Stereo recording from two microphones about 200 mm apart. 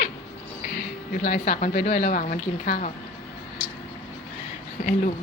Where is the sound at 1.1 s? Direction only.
40° left (ahead or behind).